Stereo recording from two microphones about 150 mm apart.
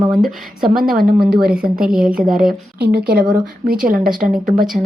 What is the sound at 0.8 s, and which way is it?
Speech, 70° right (ahead or behind).